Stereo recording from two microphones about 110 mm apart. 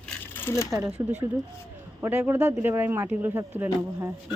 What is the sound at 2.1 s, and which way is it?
Speech, 15° right (ahead or behind).